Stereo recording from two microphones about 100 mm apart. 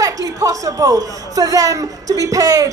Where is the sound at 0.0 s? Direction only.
35° right (ahead or behind).